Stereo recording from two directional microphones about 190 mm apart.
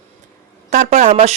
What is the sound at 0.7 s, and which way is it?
Speech, 40° right (ahead or behind).